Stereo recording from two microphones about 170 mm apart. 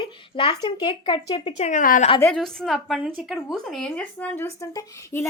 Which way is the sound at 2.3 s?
Centre (ahead or behind).